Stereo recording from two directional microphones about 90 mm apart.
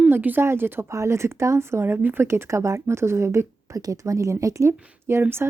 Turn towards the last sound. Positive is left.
turn(degrees=-25)  # may be behind; listen again after turning